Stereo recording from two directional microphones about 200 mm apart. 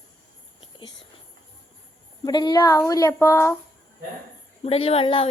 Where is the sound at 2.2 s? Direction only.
20° left (ahead or behind).